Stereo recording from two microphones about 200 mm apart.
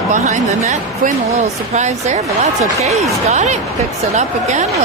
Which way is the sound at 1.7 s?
35° right (ahead or behind).